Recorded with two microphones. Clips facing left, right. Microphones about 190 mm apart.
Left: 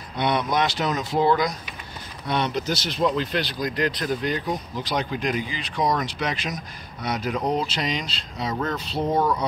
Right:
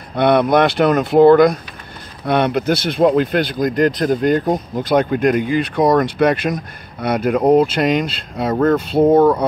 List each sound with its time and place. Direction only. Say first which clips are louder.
0.1 s speech: right 10 dB; 60° right (ahead or behind)